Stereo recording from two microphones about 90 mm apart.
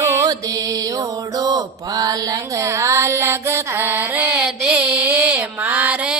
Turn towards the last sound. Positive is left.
turn(degrees=-15)  # may be behind; listen again after turning